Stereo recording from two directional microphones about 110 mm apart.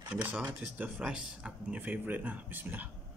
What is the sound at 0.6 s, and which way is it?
Speech, 5° right (ahead or behind).